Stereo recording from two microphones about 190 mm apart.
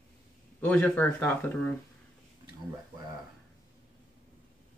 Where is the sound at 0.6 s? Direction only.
5° left (ahead or behind).